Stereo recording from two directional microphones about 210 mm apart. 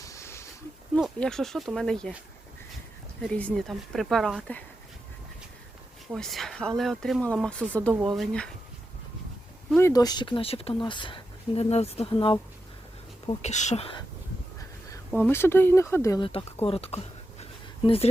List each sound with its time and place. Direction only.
0.0 s a sound: 15° left (ahead or behind)
0.9 s speech: 5° left (ahead or behind)
3.2 s speech: 5° left (ahead or behind)
6.1 s speech: centre (ahead or behind)
9.6 s speech: 10° left (ahead or behind); by 13.8 s 35° left (ahead or behind)
14.8 s speech: 10° left (ahead or behind); by 18.1 s 25° left (ahead or behind)